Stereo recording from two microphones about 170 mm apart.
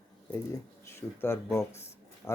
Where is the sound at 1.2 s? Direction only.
15° left (ahead or behind).